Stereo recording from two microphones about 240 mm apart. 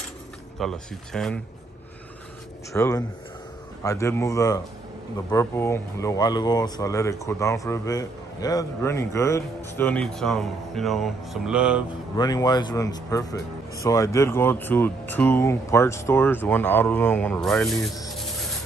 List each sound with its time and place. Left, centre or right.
0.6 s speech: centre
2.7 s speech: centre
12.2 s speech: centre